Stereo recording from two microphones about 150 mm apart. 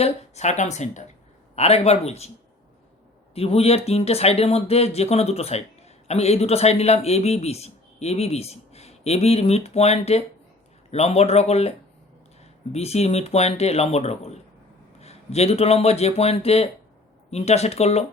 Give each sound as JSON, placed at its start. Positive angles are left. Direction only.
{"t": 0.0, "sound": "speech", "side_deg": 50}
{"t": 3.3, "sound": "speech", "side_deg": 40}
{"t": 12.7, "sound": "speech", "side_deg": 45}